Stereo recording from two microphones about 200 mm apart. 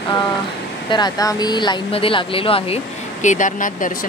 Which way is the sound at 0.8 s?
20° left (ahead or behind).